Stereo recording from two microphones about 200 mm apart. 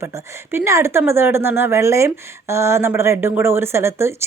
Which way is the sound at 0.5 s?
15° right (ahead or behind).